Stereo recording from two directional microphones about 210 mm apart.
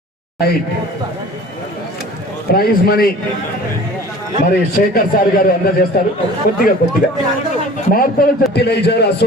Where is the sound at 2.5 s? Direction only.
45° left (ahead or behind).